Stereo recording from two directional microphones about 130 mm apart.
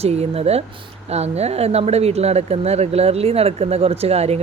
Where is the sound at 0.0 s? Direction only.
55° right (ahead or behind).